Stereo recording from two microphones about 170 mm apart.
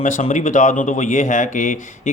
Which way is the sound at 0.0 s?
45° left (ahead or behind).